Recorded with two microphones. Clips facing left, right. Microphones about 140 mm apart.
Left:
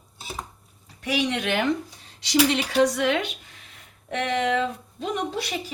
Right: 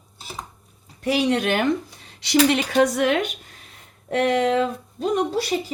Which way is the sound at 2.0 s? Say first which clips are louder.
Right 4 dB; 65° right (ahead or behind).